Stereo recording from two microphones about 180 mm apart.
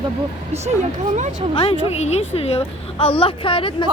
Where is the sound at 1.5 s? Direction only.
30° left (ahead or behind).